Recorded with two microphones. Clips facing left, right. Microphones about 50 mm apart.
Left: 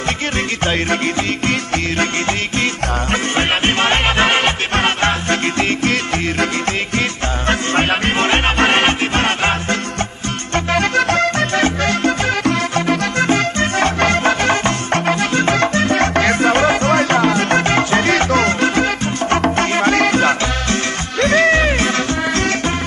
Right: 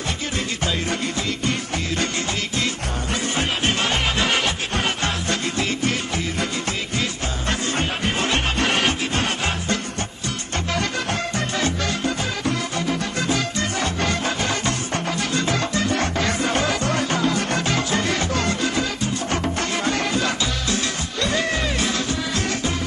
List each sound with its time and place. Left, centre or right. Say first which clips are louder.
2.6 s music: left 7 dB; left
7.0 s music: left 6 dB; left